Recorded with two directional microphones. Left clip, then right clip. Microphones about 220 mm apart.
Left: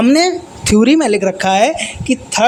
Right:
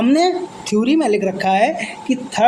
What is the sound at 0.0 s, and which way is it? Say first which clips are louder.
Speech: left 3 dB; 30° left (ahead or behind).